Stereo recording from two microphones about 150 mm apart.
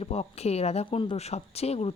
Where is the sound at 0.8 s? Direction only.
35° left (ahead or behind).